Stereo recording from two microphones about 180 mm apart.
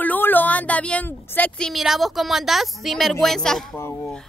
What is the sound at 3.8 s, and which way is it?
Speech, 15° left (ahead or behind).